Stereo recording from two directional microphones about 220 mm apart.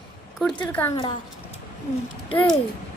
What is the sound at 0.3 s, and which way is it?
Speech, 5° left (ahead or behind).